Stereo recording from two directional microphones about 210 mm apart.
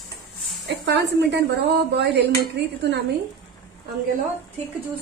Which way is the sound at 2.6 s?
55° right (ahead or behind).